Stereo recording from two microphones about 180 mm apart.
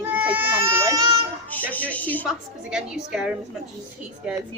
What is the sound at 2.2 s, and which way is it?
A woman's voice, 5° right (ahead or behind).